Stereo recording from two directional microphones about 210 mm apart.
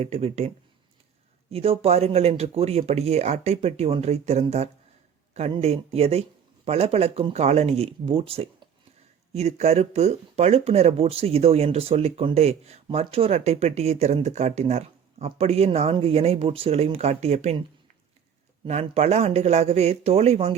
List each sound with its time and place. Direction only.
0.0 s speech: 30° right (ahead or behind)
18.6 s speech: 30° right (ahead or behind)